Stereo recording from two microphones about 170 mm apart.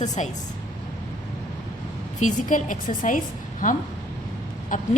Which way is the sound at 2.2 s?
50° left (ahead or behind).